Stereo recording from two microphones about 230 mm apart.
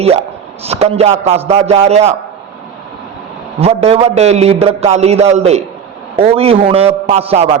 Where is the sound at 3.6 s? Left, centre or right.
Right.